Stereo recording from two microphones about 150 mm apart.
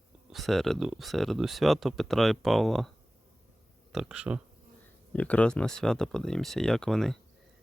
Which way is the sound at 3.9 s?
5° right (ahead or behind).